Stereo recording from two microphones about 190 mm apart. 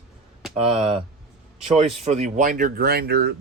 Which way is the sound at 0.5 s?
30° right (ahead or behind).